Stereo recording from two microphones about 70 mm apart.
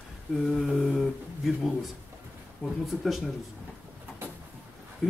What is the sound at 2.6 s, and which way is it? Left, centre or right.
Speech, centre.